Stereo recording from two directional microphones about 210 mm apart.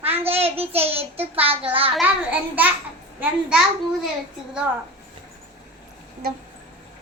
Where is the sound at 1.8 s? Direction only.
5° right (ahead or behind).